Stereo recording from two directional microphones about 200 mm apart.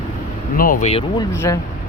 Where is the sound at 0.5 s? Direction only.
45° left (ahead or behind).